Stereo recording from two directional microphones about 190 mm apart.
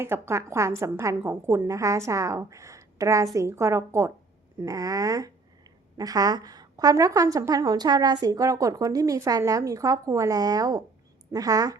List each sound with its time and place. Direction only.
0.0 s a woman's voice: 15° right (ahead or behind)